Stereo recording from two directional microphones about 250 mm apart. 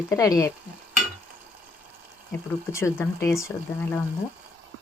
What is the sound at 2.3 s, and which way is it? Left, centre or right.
Speech, centre.